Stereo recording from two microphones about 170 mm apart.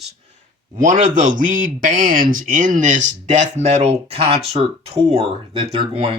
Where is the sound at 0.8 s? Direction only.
50° right (ahead or behind).